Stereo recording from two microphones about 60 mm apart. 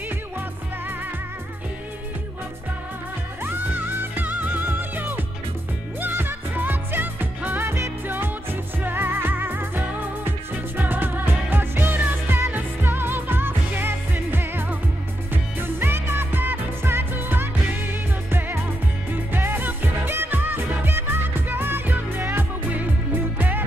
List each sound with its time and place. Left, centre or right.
3.4 s music: right